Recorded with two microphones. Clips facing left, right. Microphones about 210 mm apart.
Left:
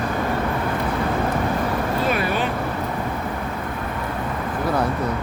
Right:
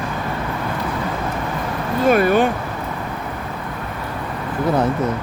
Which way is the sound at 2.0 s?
50° right (ahead or behind).